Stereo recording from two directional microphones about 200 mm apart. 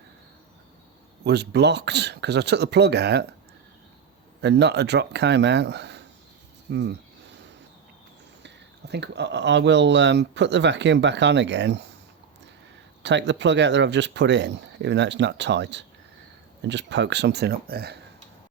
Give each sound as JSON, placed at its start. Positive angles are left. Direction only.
{"t": 1.2, "sound": "speech", "side_deg": -55}
{"t": 4.4, "sound": "speech", "side_deg": -55}
{"t": 8.4, "sound": "speech", "side_deg": -60}
{"t": 13.0, "sound": "speech", "side_deg": -60}